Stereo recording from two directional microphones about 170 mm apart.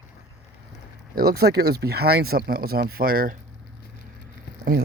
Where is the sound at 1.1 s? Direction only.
65° right (ahead or behind).